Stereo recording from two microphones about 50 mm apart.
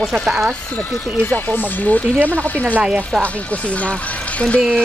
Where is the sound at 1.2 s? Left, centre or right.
Left.